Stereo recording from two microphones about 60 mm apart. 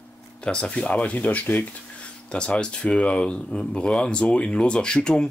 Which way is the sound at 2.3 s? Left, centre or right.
Centre.